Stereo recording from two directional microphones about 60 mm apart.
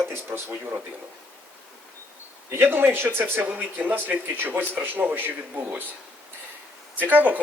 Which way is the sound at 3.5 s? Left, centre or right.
Right.